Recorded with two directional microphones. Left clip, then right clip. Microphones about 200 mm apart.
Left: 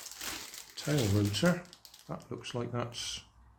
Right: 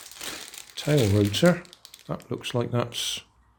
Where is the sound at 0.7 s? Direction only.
30° right (ahead or behind).